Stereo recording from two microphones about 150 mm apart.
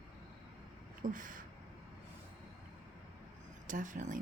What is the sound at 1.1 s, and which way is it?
Speech, 65° right (ahead or behind).